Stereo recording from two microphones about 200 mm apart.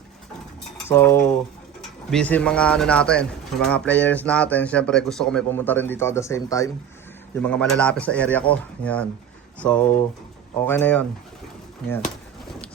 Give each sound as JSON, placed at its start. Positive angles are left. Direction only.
{"t": 0.9, "sound": "speech", "side_deg": 10}